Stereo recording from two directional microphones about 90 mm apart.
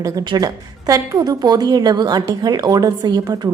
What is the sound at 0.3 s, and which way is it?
A woman's voice, 45° right (ahead or behind).